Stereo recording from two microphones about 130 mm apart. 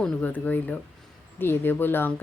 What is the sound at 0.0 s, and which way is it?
A woman's voice, 10° left (ahead or behind).